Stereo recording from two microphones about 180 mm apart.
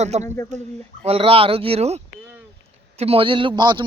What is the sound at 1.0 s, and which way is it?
A man's voice, 30° right (ahead or behind).